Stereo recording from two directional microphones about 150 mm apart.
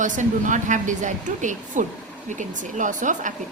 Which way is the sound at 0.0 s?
55° right (ahead or behind).